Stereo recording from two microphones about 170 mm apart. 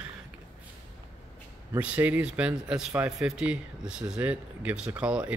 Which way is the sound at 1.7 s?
10° right (ahead or behind).